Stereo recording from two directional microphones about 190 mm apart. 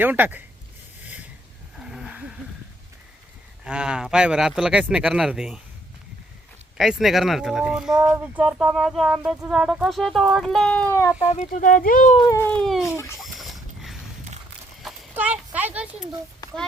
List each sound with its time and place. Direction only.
0.0 s speech: 10° right (ahead or behind)
1.0 s a sound: 10° right (ahead or behind)
3.6 s speech: 5° right (ahead or behind)
6.7 s speech: centre (ahead or behind)
11.3 s speech: 40° left (ahead or behind)
12.2 s speech: 15° left (ahead or behind)
12.6 s speech: centre (ahead or behind)
13.2 s a sound: centre (ahead or behind)
14.8 s clip-clop: 5° right (ahead or behind)